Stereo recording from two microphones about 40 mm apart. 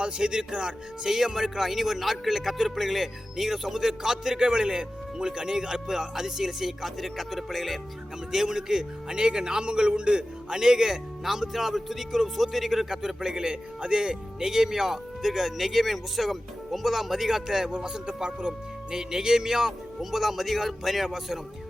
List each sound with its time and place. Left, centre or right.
0.0 s speech: right
1.0 s a man's voice: centre
8.3 s a man's voice: centre
17.7 s a man's voice: centre